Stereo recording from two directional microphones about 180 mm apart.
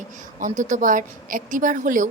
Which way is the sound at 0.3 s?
45° right (ahead or behind).